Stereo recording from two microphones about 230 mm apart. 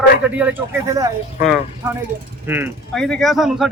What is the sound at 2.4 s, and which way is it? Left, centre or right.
Speech, centre.